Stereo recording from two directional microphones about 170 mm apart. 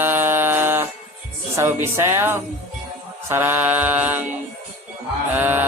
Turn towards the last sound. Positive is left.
turn(degrees=-10)  # may be behind; listen again after turning